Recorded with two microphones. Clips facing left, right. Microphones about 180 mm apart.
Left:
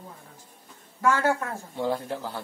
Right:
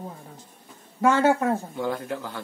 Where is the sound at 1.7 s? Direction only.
30° left (ahead or behind).